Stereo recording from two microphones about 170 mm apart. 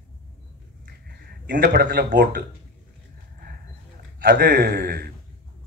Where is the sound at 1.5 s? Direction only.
65° right (ahead or behind).